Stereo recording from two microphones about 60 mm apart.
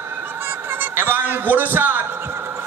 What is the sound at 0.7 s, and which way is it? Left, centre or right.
Fowl, right.